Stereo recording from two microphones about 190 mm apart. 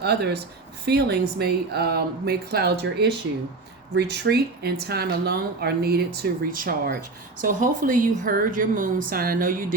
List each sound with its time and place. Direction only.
0.0 s a woman's voice: 60° right (ahead or behind)